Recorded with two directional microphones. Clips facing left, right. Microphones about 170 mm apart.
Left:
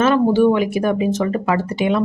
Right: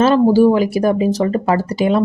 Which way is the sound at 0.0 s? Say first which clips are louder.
Right 3 dB; 35° right (ahead or behind).